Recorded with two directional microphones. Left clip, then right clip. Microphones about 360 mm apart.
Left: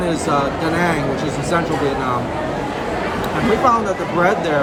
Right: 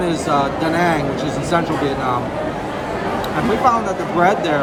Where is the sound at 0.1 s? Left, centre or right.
Centre.